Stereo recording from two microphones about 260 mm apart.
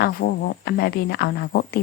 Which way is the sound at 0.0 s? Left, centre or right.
Left.